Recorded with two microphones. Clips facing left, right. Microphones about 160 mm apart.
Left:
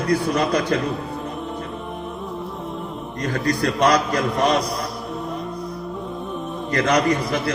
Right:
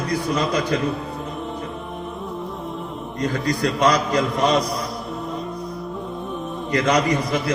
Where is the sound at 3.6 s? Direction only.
60° left (ahead or behind).